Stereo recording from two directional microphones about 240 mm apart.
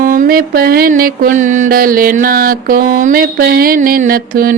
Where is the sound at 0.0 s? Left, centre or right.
Right.